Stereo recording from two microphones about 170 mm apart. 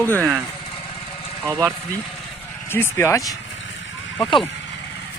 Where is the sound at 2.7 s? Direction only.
15° left (ahead or behind).